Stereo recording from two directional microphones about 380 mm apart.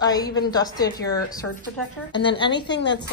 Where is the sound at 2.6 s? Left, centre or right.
Left.